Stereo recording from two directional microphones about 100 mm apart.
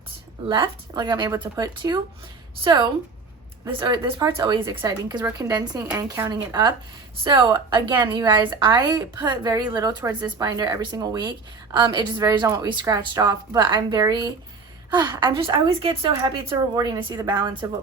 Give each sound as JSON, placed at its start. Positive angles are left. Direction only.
{"t": 0.4, "sound": "a woman's voice", "side_deg": -50}
{"t": 15.4, "sound": "speech", "side_deg": -65}
{"t": 16.7, "sound": "a woman's voice", "side_deg": -40}